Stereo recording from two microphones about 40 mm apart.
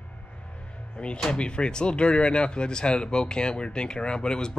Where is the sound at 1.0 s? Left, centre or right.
Left.